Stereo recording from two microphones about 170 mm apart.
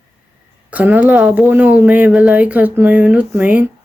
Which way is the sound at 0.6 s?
10° right (ahead or behind).